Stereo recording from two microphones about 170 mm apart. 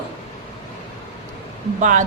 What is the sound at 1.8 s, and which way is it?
Speech, 50° right (ahead or behind).